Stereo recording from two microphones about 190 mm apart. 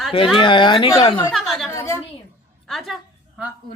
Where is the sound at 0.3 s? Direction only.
25° left (ahead or behind).